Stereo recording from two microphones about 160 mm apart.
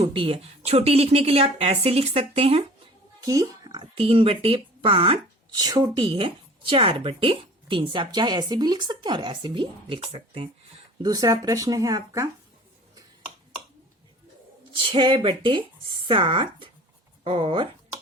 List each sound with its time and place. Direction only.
0.0 s a woman's voice: 35° right (ahead or behind)
3.2 s speech: 20° right (ahead or behind)
5.5 s speech: 25° right (ahead or behind)
11.0 s speech: 25° right (ahead or behind)
14.8 s a woman's voice: 30° right (ahead or behind)